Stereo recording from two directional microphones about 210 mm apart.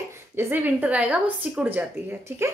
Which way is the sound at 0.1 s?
10° right (ahead or behind).